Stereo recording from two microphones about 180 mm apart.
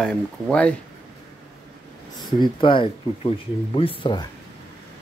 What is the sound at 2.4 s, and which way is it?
Speech, 30° left (ahead or behind).